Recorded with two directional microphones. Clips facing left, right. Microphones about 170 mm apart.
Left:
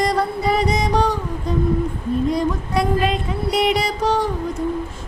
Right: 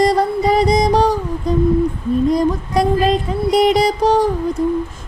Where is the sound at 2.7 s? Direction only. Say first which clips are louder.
Right 4 dB; 35° right (ahead or behind).